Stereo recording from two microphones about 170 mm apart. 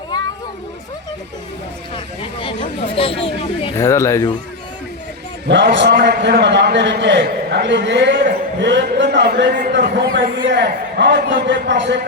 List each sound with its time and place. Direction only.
2.4 s speech: 30° left (ahead or behind)
3.8 s speech: 15° left (ahead or behind)
5.5 s a man's voice: 90° right; by 9.6 s 65° right (ahead or behind)
9.7 s a man's voice: 90° right